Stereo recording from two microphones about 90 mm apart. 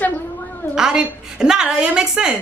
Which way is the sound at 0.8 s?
5° right (ahead or behind).